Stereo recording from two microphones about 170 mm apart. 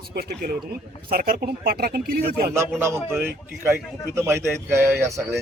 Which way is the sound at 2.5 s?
15° right (ahead or behind).